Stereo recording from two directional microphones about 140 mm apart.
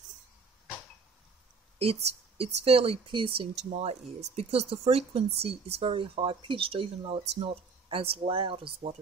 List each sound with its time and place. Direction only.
1.8 s speech: 45° right (ahead or behind)